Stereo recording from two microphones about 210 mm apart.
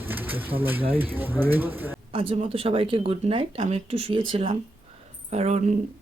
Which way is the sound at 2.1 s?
25° right (ahead or behind).